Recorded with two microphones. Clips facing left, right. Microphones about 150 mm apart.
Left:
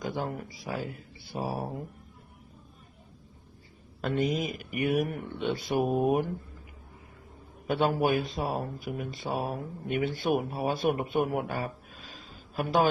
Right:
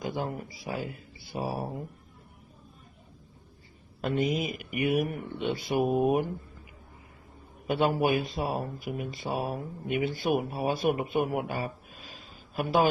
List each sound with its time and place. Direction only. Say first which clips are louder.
0.1 s speech: even; 10° right (ahead or behind)
4.0 s speech: even; 10° right (ahead or behind)
7.7 s speech: even; 10° right (ahead or behind)